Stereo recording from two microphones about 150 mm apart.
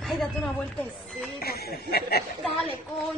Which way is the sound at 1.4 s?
90° left.